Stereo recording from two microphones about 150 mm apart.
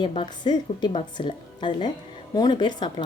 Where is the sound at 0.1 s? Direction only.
35° left (ahead or behind).